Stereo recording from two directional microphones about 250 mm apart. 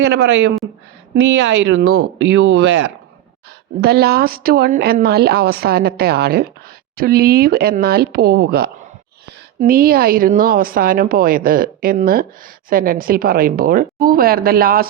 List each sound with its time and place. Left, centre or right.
0.1 s speech: right